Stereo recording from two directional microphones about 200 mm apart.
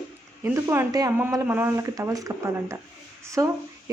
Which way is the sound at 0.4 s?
10° right (ahead or behind).